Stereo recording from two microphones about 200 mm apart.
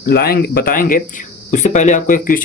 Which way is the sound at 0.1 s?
50° left (ahead or behind).